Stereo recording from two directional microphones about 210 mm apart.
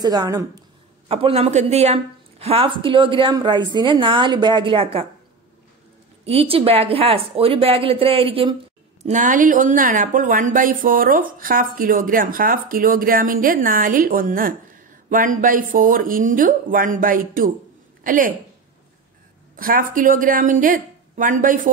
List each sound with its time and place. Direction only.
0.0 s speech: 20° right (ahead or behind)
1.0 s a woman's voice: 25° right (ahead or behind)
6.2 s a woman's voice: 30° right (ahead or behind)
9.0 s speech: 35° right (ahead or behind)
19.5 s speech: 40° right (ahead or behind)